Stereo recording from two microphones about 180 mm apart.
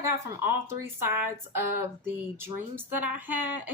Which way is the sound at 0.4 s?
15° right (ahead or behind).